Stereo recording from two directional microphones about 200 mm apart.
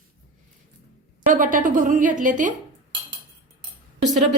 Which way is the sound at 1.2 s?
40° right (ahead or behind).